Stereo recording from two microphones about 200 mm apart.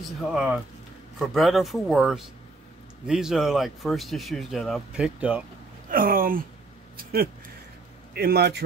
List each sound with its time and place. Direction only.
0.3 s speech: 5° right (ahead or behind)
5.9 s speech: 45° right (ahead or behind)
8.1 s speech: 50° right (ahead or behind)